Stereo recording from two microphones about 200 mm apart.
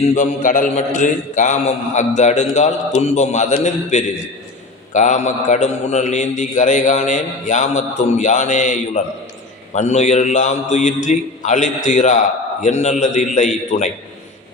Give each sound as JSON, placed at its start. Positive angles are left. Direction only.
{"t": 0.0, "sound": "mantra", "side_deg": 35}